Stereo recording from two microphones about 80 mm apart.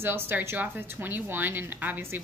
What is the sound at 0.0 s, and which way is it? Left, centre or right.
A woman's voice, right.